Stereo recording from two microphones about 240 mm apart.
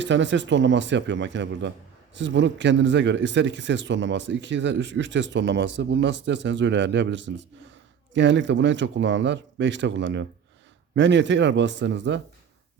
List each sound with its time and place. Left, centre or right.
0.0 s speech: right